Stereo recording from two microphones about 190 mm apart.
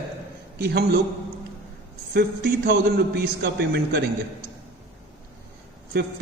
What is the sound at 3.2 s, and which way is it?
Speech, 60° right (ahead or behind).